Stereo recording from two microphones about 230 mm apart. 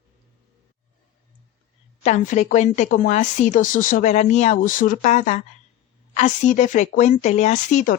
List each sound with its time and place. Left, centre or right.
2.0 s speech: left